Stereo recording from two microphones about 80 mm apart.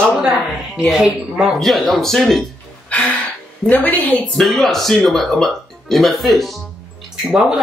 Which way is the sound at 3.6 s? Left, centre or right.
Left.